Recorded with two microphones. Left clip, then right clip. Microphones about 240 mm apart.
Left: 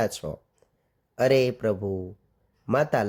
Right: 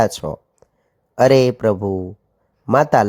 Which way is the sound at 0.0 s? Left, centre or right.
Centre.